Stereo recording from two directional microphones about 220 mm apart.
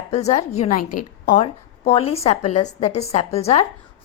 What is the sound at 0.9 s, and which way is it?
A woman's voice, 40° left (ahead or behind).